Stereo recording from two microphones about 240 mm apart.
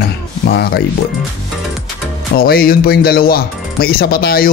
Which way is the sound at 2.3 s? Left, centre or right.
Left.